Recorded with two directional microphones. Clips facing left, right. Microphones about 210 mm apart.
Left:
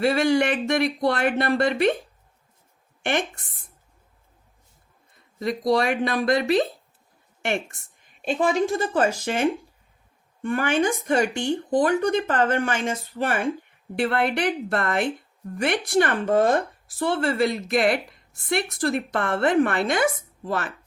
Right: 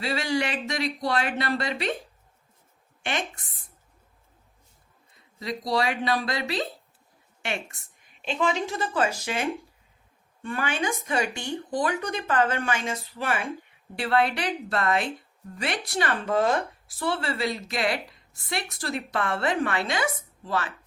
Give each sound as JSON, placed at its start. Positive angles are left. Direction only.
{"t": 0.0, "sound": "a woman's voice", "side_deg": 55}
{"t": 3.0, "sound": "a woman's voice", "side_deg": 55}
{"t": 5.4, "sound": "a woman's voice", "side_deg": 50}
{"t": 8.2, "sound": "a woman's voice", "side_deg": 45}
{"t": 10.4, "sound": "a woman's voice", "side_deg": 50}